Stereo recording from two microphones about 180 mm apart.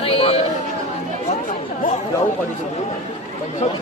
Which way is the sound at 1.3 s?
45° left (ahead or behind).